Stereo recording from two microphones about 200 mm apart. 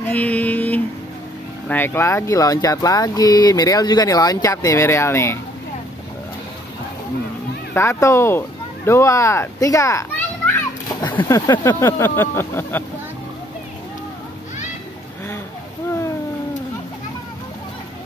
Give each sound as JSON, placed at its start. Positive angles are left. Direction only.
{"t": 0.1, "sound": "a sound", "side_deg": 10}
{"t": 1.7, "sound": "speech", "side_deg": 10}
{"t": 7.7, "sound": "speech", "side_deg": 15}